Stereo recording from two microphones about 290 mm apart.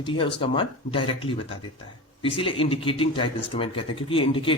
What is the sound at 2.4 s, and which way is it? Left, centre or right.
Speech, centre.